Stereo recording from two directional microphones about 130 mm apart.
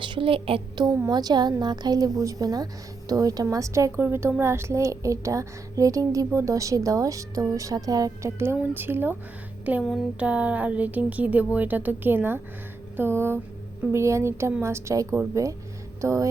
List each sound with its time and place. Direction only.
0.0 s speech: 40° right (ahead or behind)
0.9 s a woman's voice: 30° right (ahead or behind)
9.8 s a sound: centre (ahead or behind)
10.2 s a woman's voice: 10° right (ahead or behind)
16.0 s music: 25° right (ahead or behind)